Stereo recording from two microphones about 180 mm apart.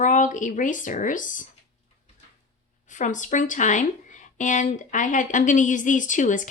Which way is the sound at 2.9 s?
45° left (ahead or behind).